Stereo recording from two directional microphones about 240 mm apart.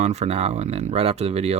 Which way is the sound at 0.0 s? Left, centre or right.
Right.